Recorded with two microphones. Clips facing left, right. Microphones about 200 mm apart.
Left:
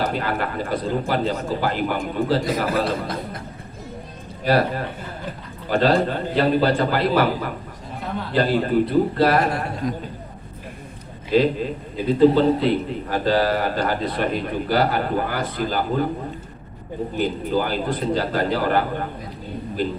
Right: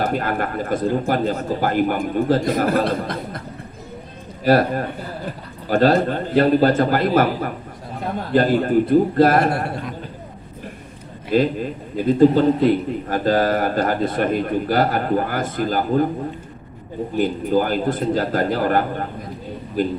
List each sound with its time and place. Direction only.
0.0 s speech: 50° right (ahead or behind)
4.4 s speech: 45° right (ahead or behind)
11.3 s speech: 50° right (ahead or behind)
17.2 s speech: 45° right (ahead or behind)